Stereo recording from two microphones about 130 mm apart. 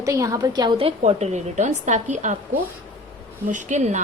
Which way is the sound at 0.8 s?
50° right (ahead or behind).